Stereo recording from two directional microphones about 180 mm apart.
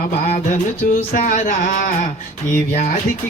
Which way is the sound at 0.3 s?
40° left (ahead or behind).